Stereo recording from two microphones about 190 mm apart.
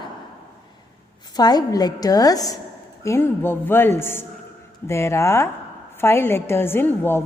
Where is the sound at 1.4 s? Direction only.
20° left (ahead or behind).